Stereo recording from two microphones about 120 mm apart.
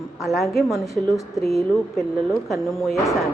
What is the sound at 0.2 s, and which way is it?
A woman's voice, centre (ahead or behind).